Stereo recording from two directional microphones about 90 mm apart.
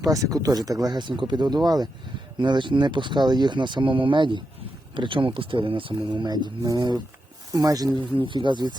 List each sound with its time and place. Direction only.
0.1 s speech: 40° right (ahead or behind)
2.4 s speech: 60° right (ahead or behind); by 5.9 s 75° right (ahead or behind)
5.9 s speech: 50° right (ahead or behind)
7.9 s speech: 65° right (ahead or behind)